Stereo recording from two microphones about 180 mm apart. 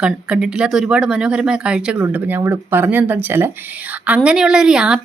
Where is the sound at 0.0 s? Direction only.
5° right (ahead or behind).